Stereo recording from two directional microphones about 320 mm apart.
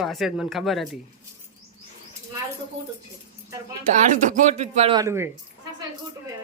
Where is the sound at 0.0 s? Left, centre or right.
Centre.